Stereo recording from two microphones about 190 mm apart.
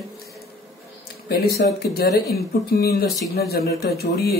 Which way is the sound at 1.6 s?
55° left (ahead or behind).